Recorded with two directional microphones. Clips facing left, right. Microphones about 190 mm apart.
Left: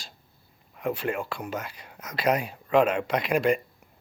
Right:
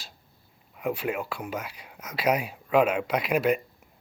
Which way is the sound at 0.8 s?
10° right (ahead or behind).